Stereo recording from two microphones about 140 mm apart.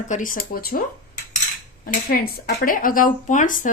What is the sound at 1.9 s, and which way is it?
Speech, 90° left.